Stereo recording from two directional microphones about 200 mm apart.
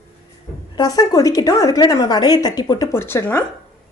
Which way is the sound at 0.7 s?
20° left (ahead or behind).